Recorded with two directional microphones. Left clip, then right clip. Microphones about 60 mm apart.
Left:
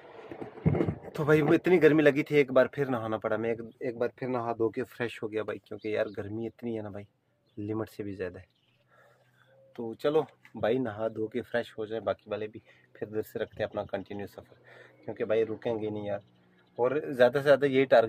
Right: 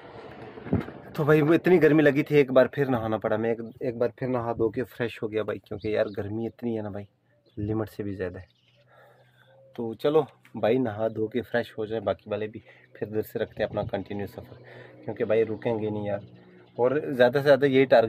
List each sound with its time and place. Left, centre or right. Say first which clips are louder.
0.0 s vehicle: right 4 dB; centre
1.1 s speech: right 3 dB; centre
3.5 s speech: right 4 dB; left
4.9 s speech: right 4 dB; centre
9.8 s speech: right 4 dB; centre